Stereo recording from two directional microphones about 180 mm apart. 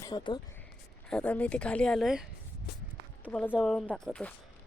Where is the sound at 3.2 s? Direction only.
10° left (ahead or behind).